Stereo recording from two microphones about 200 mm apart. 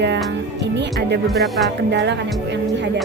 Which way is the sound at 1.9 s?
60° right (ahead or behind).